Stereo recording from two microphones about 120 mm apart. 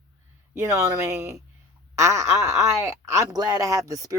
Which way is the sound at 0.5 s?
25° right (ahead or behind).